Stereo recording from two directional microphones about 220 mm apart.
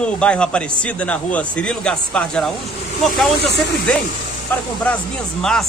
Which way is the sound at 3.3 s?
50° left (ahead or behind).